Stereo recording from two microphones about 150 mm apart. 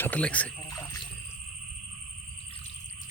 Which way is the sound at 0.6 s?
25° left (ahead or behind).